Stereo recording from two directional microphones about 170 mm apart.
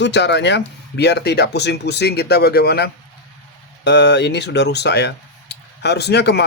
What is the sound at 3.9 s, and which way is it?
Speech, 90° left.